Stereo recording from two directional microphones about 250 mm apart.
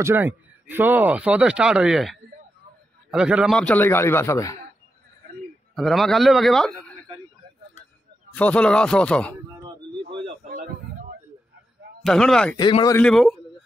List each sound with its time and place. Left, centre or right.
0.0 s a man's voice: centre
5.8 s speech: centre
8.4 s speech: centre
10.5 s a sound: right
12.0 s speech: centre
12.5 s a man's voice: centre
13.0 s speech: centre